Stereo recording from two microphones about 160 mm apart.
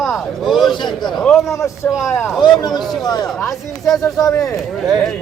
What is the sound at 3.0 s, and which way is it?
Speech, 25° left (ahead or behind).